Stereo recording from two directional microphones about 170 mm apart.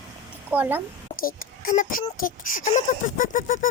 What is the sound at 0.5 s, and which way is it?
Speech, 10° right (ahead or behind).